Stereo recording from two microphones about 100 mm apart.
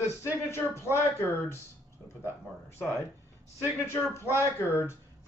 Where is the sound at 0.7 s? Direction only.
25° left (ahead or behind).